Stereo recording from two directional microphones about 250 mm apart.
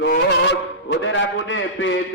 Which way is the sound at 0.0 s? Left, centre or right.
Left.